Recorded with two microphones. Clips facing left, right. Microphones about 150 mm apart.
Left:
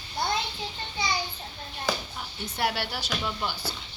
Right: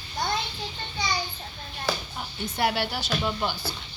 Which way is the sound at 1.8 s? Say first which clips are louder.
Right 1 dB; 5° right (ahead or behind).